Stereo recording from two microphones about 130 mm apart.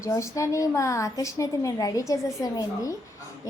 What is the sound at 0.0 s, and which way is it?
A woman's voice, 25° left (ahead or behind).